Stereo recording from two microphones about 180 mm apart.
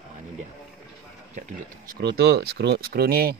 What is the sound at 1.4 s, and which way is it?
Speech, 60° right (ahead or behind).